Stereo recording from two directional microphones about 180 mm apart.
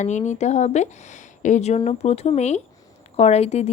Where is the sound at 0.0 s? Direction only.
40° left (ahead or behind).